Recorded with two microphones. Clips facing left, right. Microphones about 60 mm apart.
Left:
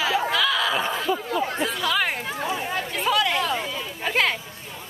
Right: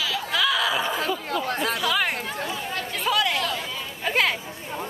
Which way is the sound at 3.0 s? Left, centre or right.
Centre.